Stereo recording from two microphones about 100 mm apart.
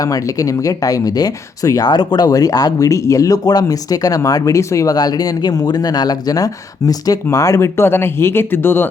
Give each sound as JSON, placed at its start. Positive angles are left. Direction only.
{"t": 0.0, "sound": "speech", "side_deg": 35}